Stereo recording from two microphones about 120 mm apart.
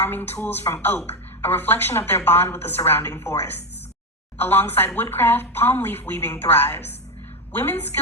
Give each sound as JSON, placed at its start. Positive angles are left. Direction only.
{"t": 0.0, "sound": "speech", "side_deg": 15}